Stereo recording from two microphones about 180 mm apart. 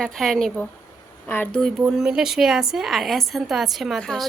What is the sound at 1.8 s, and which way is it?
A woman's voice, 5° right (ahead or behind).